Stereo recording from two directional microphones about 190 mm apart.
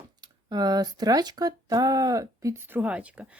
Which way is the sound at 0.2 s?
20° right (ahead or behind).